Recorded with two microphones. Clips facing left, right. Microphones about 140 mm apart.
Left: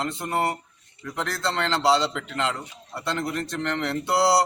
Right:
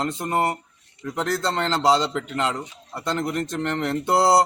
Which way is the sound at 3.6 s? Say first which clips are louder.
Right 2 dB; 45° right (ahead or behind).